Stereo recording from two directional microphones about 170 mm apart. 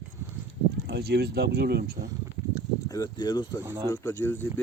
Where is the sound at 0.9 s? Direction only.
70° right (ahead or behind).